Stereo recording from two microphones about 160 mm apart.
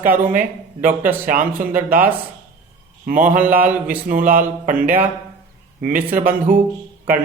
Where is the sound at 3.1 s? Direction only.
55° right (ahead or behind).